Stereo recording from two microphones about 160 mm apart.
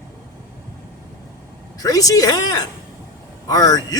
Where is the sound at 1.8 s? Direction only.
20° left (ahead or behind).